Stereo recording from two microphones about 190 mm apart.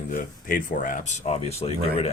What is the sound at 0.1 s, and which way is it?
Speech, 45° left (ahead or behind).